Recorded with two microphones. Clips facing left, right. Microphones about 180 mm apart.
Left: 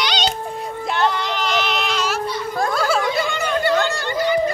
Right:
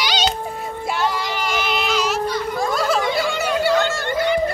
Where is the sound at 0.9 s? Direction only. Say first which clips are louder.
Left 2 dB; 5° right (ahead or behind).